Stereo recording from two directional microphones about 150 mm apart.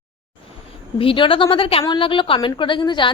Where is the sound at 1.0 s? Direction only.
35° left (ahead or behind).